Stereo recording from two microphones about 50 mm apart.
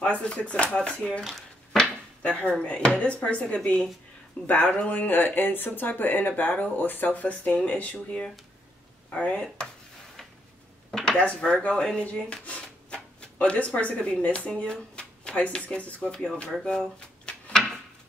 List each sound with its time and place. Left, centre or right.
0.2 s speech: left
1.2 s a sound: centre
1.8 s drawer open or close: left
3.0 s speech: left
11.1 s speech: left
12.0 s speech: left
14.6 s a sound: centre
15.5 s speech: centre
17.0 s a sound: centre